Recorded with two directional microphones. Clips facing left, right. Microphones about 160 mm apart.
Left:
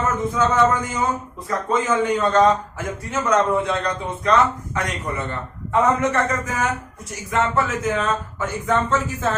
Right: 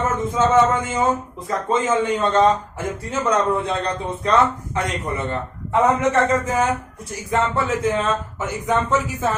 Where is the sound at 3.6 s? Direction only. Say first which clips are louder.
Even; 30° right (ahead or behind).